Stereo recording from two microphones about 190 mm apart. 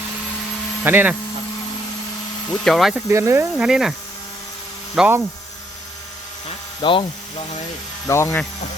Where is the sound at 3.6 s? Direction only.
5° right (ahead or behind).